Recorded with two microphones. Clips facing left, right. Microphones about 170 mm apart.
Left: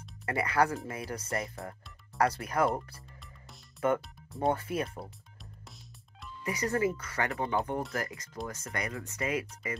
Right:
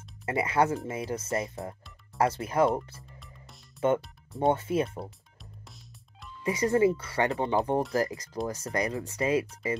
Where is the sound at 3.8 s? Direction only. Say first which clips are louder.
Right 3 dB; 25° right (ahead or behind).